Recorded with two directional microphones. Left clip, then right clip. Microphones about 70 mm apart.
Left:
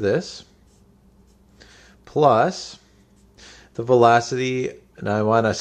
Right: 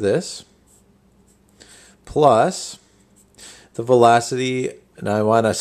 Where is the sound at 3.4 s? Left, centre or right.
Right.